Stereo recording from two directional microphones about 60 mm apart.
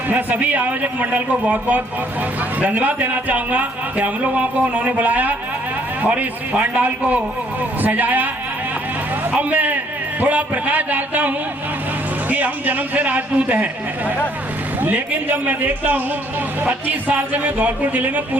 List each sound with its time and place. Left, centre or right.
0.1 s a man's voice: right
9.3 s a man's voice: right
14.8 s a man's voice: right